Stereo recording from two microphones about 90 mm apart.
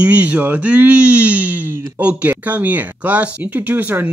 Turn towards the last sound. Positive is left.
turn(degrees=-20)  # may be behind; listen again after turning